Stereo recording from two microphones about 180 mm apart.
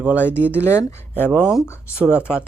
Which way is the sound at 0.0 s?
10° right (ahead or behind).